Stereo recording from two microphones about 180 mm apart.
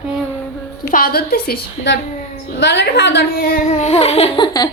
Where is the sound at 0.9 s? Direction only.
55° left (ahead or behind).